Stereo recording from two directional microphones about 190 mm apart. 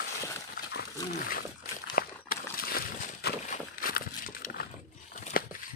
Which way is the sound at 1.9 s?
50° left (ahead or behind).